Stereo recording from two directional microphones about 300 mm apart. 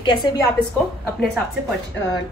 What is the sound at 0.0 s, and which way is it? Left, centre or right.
Speech, centre.